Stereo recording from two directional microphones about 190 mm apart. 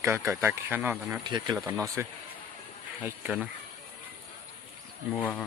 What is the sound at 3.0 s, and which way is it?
Speech, 5° right (ahead or behind).